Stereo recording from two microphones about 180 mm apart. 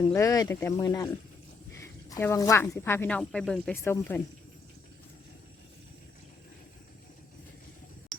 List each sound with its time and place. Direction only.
0.1 s speech: 20° left (ahead or behind)